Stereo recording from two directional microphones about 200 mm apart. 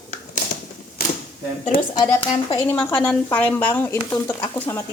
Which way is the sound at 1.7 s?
45° left (ahead or behind).